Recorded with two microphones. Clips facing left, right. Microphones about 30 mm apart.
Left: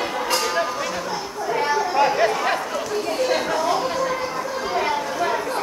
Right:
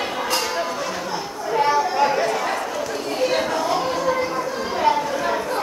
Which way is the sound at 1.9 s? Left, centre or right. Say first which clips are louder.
Even; centre.